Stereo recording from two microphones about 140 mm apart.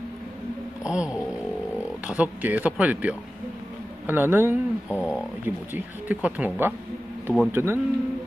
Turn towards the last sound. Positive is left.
turn(degrees=-15)  # may be behind; listen again after turning